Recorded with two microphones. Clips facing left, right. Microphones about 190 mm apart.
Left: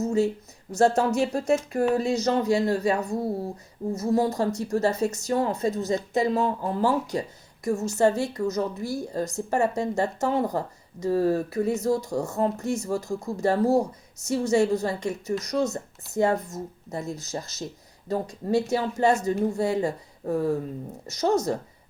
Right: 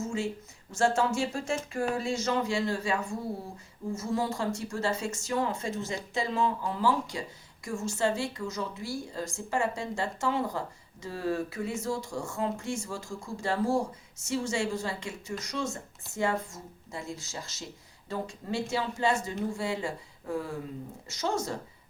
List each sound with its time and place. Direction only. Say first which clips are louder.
0.0 s a woman's voice: left 9 dB; 40° left (ahead or behind)